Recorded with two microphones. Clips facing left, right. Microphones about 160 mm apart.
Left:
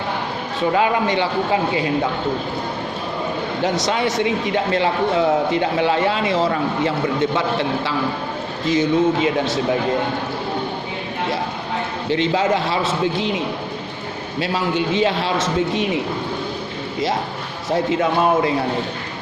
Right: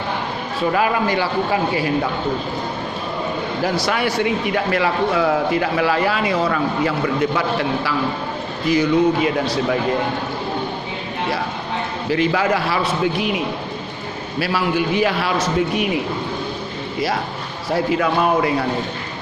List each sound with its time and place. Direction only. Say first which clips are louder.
0.7 s a man's voice: left 1 dB; 25° left (ahead or behind)
3.6 s a man's voice: left 1 dB; 20° left (ahead or behind)
12.0 s a man's voice: even; 25° left (ahead or behind)
17.7 s a man's voice: even; 25° left (ahead or behind)